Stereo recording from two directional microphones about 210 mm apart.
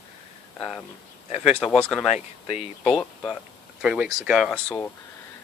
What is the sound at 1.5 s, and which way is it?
Speech, centre (ahead or behind).